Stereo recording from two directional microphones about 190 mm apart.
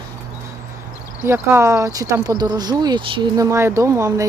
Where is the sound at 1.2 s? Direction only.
15° right (ahead or behind).